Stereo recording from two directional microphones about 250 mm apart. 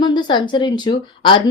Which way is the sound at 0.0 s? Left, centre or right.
Centre.